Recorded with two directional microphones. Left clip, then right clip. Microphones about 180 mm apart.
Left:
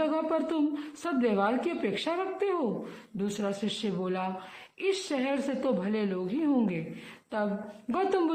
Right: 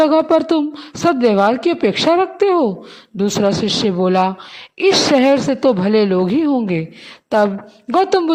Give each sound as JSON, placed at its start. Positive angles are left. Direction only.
{"t": 0.0, "sound": "a woman's voice", "side_deg": -45}
{"t": 7.9, "sound": "a woman's voice", "side_deg": -40}